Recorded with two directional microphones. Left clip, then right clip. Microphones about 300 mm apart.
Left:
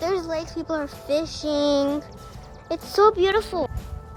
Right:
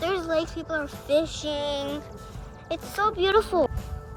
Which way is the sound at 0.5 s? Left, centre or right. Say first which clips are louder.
Left 2 dB; centre.